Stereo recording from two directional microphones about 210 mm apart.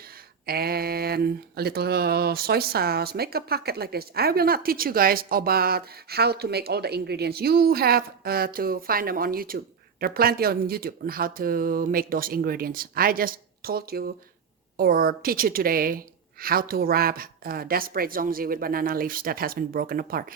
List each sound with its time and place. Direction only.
0.4 s speech: 45° right (ahead or behind)